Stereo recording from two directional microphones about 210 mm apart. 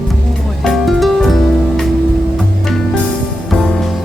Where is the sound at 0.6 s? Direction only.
Centre (ahead or behind).